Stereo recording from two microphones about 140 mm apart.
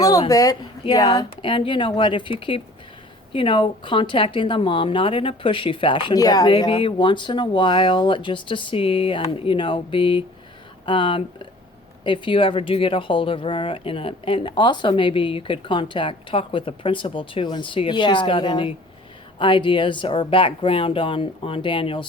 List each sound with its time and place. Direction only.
0.0 s speech: 25° left (ahead or behind)
1.4 s a woman's voice: 35° left (ahead or behind)